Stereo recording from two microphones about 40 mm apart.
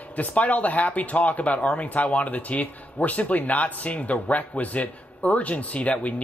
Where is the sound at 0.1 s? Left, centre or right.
Left.